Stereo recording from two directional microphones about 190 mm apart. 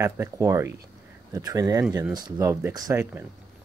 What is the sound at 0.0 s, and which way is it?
Speech, 15° right (ahead or behind).